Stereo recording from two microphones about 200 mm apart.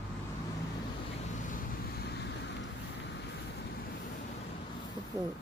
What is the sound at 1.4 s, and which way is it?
Vehicle, 45° left (ahead or behind).